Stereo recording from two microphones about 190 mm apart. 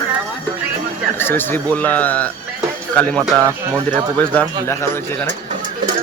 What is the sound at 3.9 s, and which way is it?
A man's voice, 10° left (ahead or behind).